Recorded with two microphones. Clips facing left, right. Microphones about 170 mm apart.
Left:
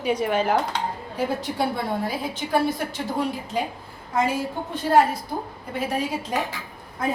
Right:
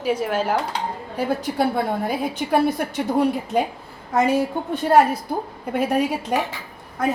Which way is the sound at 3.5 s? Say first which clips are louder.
Right 4 dB; 60° right (ahead or behind).